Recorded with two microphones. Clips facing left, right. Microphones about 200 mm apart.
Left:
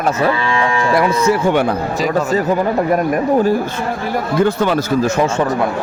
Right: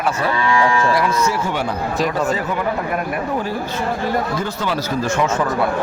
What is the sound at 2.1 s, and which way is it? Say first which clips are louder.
Speech: left 5 dB; 40° left (ahead or behind).